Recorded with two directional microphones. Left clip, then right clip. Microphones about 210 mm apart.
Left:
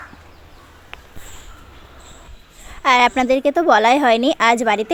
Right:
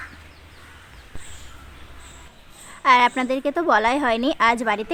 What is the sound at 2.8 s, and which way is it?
Speech, 20° left (ahead or behind).